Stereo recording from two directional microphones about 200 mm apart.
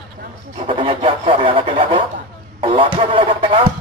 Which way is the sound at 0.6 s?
25° right (ahead or behind).